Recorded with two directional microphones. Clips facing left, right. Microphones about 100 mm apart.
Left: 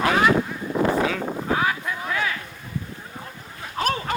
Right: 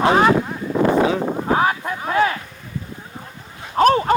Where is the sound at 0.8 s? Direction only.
60° right (ahead or behind).